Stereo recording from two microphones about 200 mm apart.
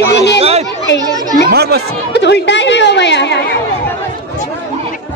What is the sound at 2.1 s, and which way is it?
A woman's voice, 60° left (ahead or behind).